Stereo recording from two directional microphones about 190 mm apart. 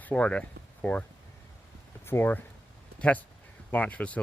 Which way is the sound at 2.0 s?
10° left (ahead or behind).